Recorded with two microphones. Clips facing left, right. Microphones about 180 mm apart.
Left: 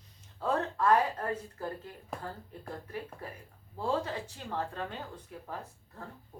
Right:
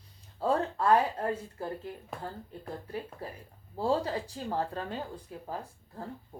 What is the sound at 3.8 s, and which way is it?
Speech, 35° right (ahead or behind).